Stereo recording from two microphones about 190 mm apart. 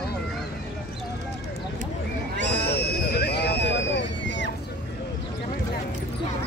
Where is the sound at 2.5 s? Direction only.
60° left (ahead or behind).